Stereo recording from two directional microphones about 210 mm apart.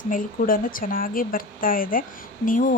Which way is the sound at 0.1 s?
45° left (ahead or behind).